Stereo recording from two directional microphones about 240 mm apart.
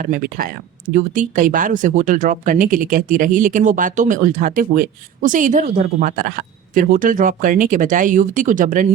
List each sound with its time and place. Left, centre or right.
0.0 s speech: right